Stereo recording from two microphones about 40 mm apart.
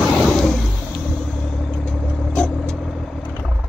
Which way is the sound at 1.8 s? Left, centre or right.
Left.